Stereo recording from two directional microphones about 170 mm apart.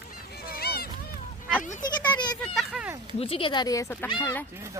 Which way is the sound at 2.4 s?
Centre (ahead or behind).